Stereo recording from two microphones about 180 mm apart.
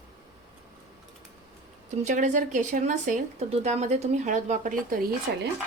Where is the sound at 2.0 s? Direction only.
45° right (ahead or behind).